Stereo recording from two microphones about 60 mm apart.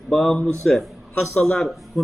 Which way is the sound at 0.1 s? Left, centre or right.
Centre.